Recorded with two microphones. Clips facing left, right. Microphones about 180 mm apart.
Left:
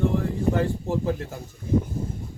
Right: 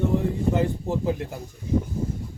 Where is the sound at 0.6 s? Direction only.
15° right (ahead or behind).